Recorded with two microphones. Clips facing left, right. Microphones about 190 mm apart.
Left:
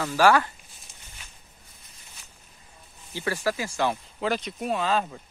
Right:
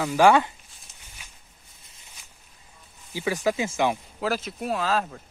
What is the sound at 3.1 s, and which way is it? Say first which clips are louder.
Speech: right 2 dB; 15° right (ahead or behind).